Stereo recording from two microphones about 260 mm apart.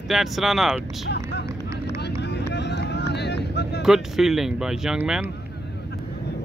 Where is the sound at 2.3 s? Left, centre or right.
Left.